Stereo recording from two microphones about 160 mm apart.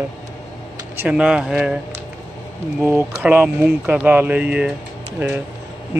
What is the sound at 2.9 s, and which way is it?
Speech, 10° right (ahead or behind).